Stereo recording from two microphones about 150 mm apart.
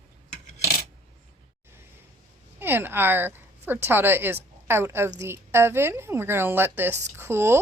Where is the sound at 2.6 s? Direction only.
15° right (ahead or behind).